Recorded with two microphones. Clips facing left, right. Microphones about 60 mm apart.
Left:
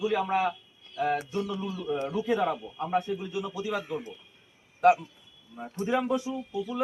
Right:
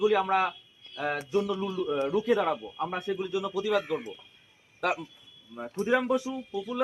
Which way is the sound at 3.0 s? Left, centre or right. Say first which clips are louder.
Right 2 dB; right.